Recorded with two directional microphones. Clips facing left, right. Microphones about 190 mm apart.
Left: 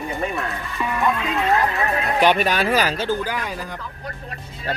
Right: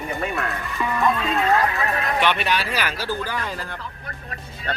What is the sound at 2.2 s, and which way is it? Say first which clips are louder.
Speech: left 6 dB; 40° left (ahead or behind).